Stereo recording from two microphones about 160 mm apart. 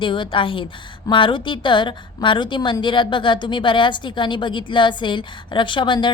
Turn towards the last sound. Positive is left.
turn(degrees=30)  # may be behind; listen again after turning